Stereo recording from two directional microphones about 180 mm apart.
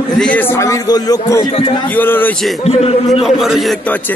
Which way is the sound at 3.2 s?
Centre (ahead or behind).